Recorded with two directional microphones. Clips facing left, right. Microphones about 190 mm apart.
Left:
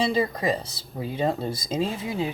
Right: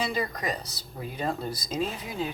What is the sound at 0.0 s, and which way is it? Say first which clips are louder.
Speech: left 6 dB; 30° left (ahead or behind).